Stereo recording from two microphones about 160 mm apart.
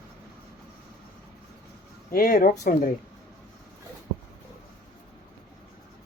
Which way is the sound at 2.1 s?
70° left (ahead or behind).